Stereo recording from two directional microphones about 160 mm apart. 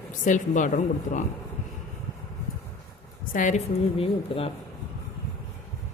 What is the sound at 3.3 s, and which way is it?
Speech, 55° left (ahead or behind).